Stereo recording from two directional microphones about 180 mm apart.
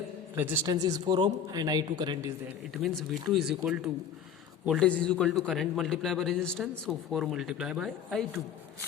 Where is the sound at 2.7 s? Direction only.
Centre (ahead or behind).